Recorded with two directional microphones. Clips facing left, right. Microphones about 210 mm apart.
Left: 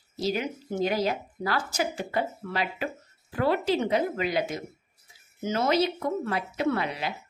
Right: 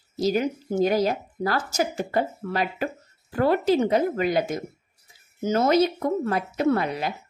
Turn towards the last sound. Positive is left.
turn(degrees=-45)  # may be behind; listen again after turning